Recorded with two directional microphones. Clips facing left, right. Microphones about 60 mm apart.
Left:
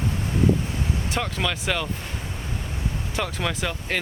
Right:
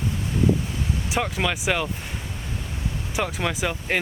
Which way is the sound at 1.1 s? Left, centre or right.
Centre.